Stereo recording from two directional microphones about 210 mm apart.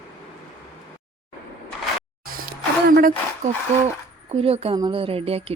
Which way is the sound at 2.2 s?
45° right (ahead or behind).